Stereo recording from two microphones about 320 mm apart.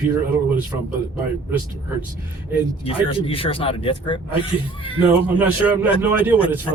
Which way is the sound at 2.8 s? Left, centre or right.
Centre.